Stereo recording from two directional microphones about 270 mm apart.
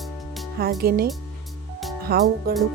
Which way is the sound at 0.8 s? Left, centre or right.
Right.